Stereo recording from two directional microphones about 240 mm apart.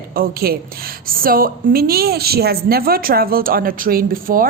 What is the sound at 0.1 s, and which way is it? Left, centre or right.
A woman's voice, right.